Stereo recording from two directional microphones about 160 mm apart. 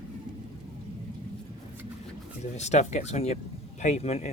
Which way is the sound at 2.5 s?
45° left (ahead or behind).